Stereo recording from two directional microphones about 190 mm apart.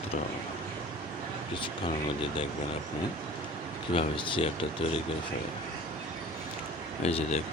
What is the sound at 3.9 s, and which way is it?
Speech, 25° left (ahead or behind).